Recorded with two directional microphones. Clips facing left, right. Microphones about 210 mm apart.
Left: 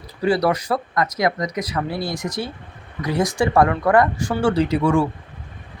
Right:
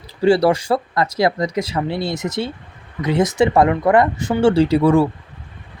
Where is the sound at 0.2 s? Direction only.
30° right (ahead or behind).